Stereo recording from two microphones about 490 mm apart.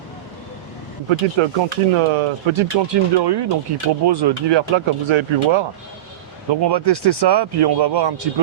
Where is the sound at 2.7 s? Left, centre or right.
Right.